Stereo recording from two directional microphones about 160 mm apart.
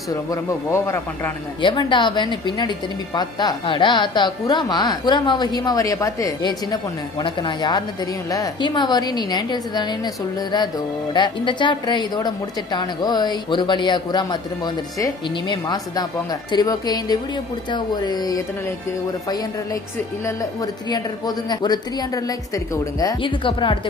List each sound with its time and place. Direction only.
0.1 s a man's voice: 20° left (ahead or behind)
1.6 s a man's voice: 30° left (ahead or behind)
11.1 s a man's voice: 30° left (ahead or behind)